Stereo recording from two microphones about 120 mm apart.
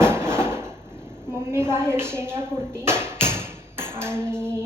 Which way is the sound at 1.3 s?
20° right (ahead or behind).